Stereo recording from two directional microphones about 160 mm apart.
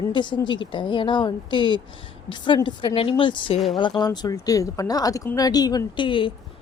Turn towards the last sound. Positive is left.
turn(degrees=30)  # may be behind; listen again after turning